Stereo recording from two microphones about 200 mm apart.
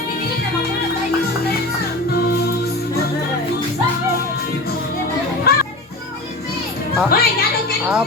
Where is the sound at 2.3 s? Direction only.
50° left (ahead or behind).